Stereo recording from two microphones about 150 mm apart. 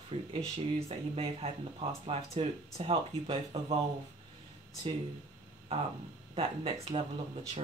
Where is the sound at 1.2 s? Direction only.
40° right (ahead or behind).